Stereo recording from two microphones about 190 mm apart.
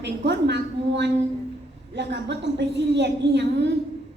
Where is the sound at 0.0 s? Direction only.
65° right (ahead or behind).